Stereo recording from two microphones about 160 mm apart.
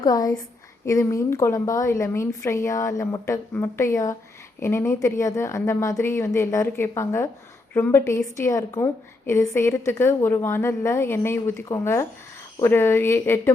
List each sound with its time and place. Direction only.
0.0 s a woman's voice: 25° left (ahead or behind)